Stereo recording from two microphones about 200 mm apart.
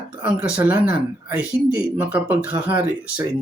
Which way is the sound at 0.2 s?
5° right (ahead or behind).